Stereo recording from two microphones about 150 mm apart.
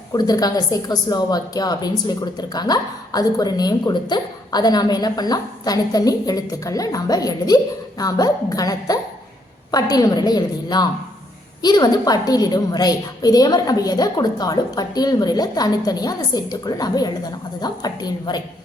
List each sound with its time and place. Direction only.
0.1 s a woman's voice: 25° left (ahead or behind)